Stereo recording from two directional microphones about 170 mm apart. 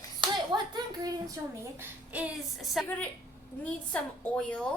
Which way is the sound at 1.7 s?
10° right (ahead or behind).